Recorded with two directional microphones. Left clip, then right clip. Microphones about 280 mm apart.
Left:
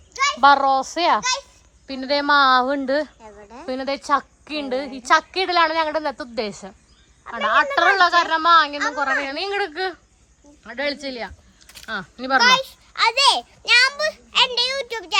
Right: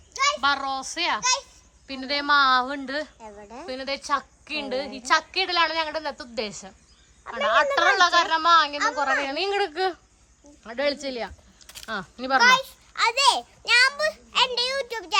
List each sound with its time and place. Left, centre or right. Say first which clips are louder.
0.3 s a woman's voice: left 10 dB; centre
3.2 s a sound: even; right
3.7 s a woman's voice: left 6 dB; centre